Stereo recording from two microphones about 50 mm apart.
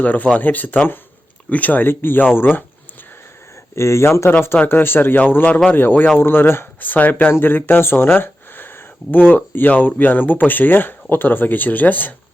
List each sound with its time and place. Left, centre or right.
0.0 s speech: left
1.9 s speech: left
3.8 s speech: left
4.5 s speech: left
6.7 s speech: left